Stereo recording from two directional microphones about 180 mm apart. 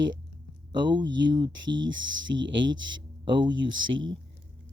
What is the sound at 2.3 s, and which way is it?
Speech, 75° right (ahead or behind).